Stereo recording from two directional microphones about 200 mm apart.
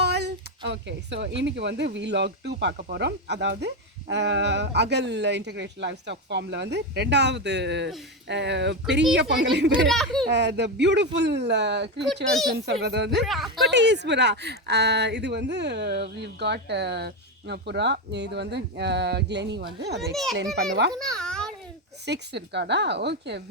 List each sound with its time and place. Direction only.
0.0 s a sound: 55° right (ahead or behind)
1.4 s a woman's voice: 60° right (ahead or behind)
9.7 s a child's voice: centre (ahead or behind)
10.2 s a woman's voice: 60° right (ahead or behind)
13.2 s a child's voice: centre (ahead or behind)
13.7 s a woman's voice: 60° right (ahead or behind)
21.1 s a sound: 5° left (ahead or behind)
22.0 s a woman's voice: 55° right (ahead or behind)